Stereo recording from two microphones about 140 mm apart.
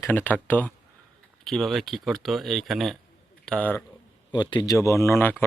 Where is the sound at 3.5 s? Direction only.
10° left (ahead or behind).